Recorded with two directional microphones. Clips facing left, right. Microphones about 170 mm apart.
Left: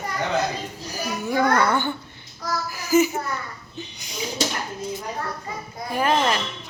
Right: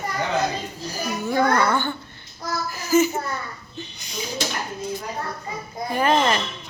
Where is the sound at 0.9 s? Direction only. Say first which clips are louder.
Right 1 dB; 15° left (ahead or behind).